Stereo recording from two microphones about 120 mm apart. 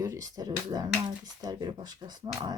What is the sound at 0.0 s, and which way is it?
Speech, 30° right (ahead or behind).